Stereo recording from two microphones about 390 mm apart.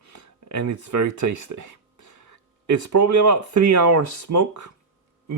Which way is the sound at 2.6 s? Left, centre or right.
Right.